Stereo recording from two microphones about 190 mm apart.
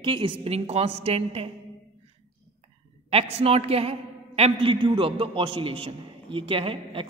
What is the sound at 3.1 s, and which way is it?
A man's voice, 30° right (ahead or behind).